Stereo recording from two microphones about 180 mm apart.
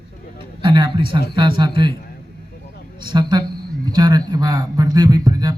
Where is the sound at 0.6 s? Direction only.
25° right (ahead or behind).